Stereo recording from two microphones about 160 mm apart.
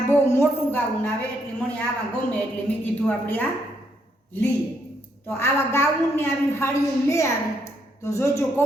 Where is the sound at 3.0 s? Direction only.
10° left (ahead or behind).